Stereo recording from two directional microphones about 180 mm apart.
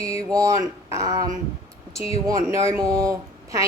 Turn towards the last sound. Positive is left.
turn(degrees=-20)  # may be behind; listen again after turning